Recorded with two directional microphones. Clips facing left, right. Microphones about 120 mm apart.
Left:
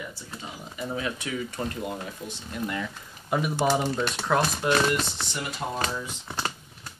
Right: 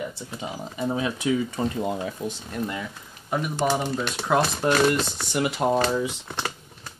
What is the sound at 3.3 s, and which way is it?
Speech, 5° left (ahead or behind).